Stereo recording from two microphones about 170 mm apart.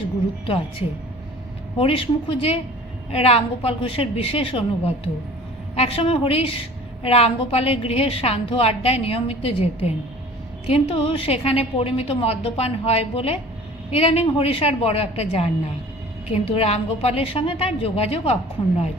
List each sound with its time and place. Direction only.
0.4 s a woman's voice: 35° left (ahead or behind)
5.7 s a woman's voice: 35° left (ahead or behind)